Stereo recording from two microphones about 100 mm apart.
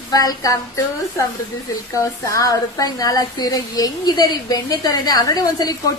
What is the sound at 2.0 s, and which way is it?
Speech, 35° left (ahead or behind).